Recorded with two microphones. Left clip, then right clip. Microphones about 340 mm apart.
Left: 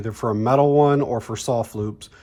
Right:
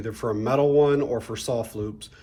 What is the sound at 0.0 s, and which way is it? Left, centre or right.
Speech, centre.